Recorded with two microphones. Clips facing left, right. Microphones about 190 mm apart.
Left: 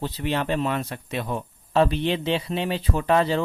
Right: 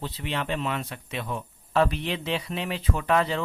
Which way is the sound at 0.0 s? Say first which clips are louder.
Left 5 dB; 45° left (ahead or behind).